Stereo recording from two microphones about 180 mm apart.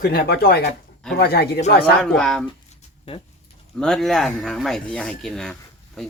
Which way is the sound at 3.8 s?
5° left (ahead or behind).